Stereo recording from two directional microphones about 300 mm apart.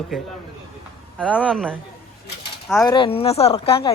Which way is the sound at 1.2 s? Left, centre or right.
Centre.